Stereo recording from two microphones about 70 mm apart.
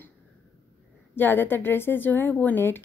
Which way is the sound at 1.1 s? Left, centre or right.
Left.